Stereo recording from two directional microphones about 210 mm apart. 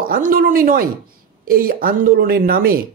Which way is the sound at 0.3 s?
40° right (ahead or behind).